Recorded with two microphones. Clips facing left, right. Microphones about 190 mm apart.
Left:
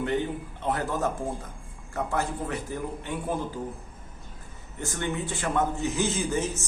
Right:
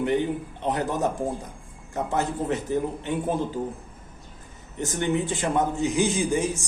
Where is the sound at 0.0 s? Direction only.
20° right (ahead or behind).